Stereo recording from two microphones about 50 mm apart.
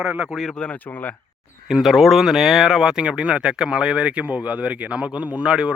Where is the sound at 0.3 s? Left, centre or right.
Centre.